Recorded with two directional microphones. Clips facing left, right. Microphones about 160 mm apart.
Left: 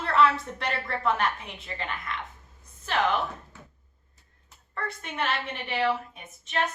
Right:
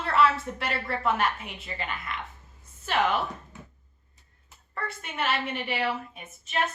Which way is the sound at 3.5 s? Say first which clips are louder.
Right 3 dB; 15° right (ahead or behind).